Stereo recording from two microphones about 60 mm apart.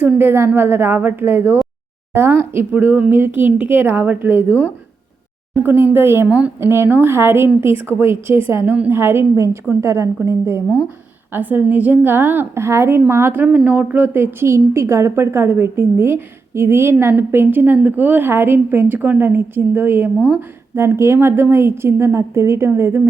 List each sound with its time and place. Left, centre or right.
0.2 s a woman's voice: right
4.0 s speech: right
4.3 s a woman's voice: right
5.6 s a woman's voice: right
9.3 s a woman's voice: right
10.8 s a woman's voice: right
12.5 s a woman's voice: right
13.4 s speech: right
14.1 s a woman's voice: right
18.3 s a woman's voice: right